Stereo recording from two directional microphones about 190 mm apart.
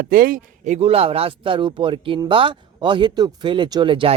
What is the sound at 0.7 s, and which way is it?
Speech, 30° right (ahead or behind).